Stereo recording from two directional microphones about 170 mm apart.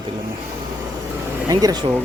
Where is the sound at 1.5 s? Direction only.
20° right (ahead or behind).